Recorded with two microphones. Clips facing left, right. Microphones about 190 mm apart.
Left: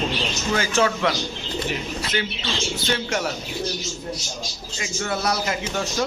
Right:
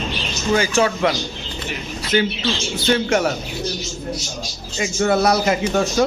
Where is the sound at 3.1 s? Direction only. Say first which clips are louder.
Right 7 dB; 60° right (ahead or behind).